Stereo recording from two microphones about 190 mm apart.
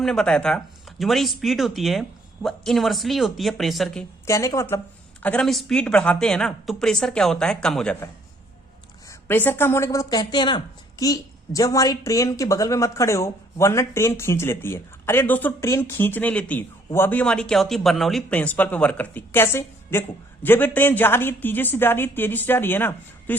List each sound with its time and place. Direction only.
0.0 s speech: 5° left (ahead or behind)
4.3 s a woman's voice: 15° left (ahead or behind)
9.0 s a woman's voice: 10° left (ahead or behind)